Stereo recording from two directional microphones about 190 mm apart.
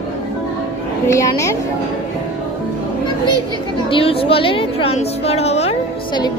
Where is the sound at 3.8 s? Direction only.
30° left (ahead or behind).